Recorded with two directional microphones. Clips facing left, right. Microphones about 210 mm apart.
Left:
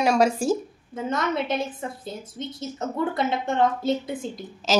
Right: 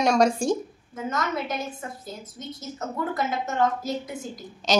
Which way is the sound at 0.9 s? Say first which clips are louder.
Left 3 dB; 30° left (ahead or behind).